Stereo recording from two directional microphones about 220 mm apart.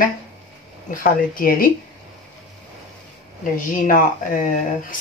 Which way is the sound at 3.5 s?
35° left (ahead or behind).